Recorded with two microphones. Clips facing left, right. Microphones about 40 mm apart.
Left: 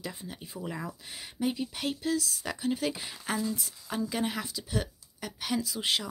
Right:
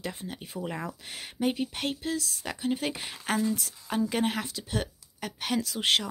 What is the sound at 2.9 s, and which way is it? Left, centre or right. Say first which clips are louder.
Speech: right 3 dB; right.